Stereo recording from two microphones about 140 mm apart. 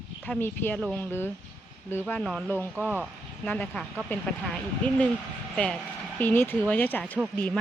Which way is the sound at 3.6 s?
Centre (ahead or behind).